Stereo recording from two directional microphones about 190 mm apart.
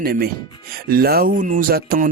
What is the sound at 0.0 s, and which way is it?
A man's voice, 55° right (ahead or behind).